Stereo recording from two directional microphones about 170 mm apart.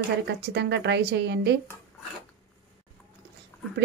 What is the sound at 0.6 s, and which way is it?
Speech, 90° right.